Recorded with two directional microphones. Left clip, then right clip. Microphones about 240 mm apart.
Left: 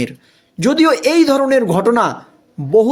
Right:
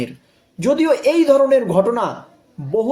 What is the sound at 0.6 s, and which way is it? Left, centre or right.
A man's voice, left.